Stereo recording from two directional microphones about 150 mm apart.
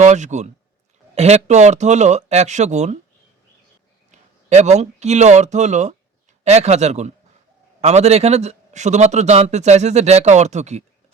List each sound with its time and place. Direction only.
0.0 s a man's voice: 50° right (ahead or behind)
4.1 s a man's voice: 50° right (ahead or behind)